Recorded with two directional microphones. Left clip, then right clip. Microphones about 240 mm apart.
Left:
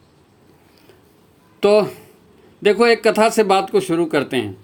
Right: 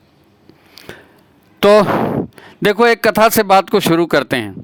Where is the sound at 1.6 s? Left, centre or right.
Right.